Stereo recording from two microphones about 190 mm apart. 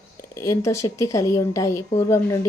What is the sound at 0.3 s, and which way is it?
A woman's voice, 15° left (ahead or behind).